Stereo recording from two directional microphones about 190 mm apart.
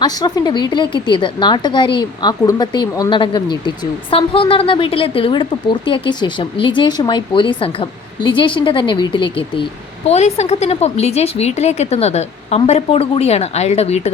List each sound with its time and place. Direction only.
0.0 s speech: 20° left (ahead or behind)
10.1 s a woman's voice: 35° left (ahead or behind)